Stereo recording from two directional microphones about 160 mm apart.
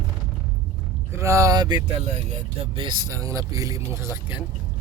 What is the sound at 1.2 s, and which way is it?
Speech, 20° right (ahead or behind).